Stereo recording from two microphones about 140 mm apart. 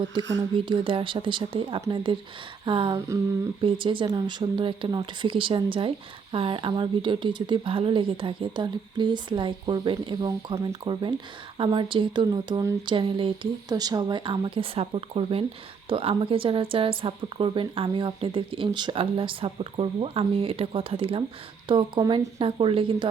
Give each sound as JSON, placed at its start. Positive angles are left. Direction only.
{"t": 0.1, "sound": "a woman's voice", "side_deg": -35}
{"t": 11.5, "sound": "a woman's voice", "side_deg": -35}
{"t": 13.7, "sound": "a woman's voice", "side_deg": -25}